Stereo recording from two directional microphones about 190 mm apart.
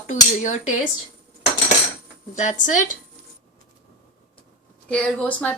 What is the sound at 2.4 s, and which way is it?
Speech, 40° left (ahead or behind).